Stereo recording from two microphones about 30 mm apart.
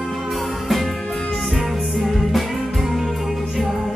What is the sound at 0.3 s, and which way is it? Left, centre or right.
Music, centre.